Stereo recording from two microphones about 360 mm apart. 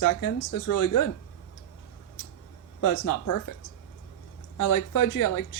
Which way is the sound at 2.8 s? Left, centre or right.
Left.